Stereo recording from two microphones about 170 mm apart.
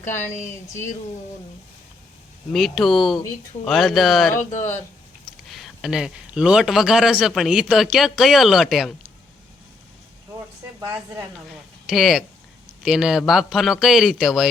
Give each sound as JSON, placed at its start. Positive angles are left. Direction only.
{"t": 0.4, "sound": "speech", "side_deg": 15}
{"t": 2.5, "sound": "a man's voice", "side_deg": 0}
{"t": 5.5, "sound": "a man's voice", "side_deg": 0}
{"t": 10.8, "sound": "speech", "side_deg": -20}
{"t": 11.4, "sound": "a man's voice", "side_deg": 0}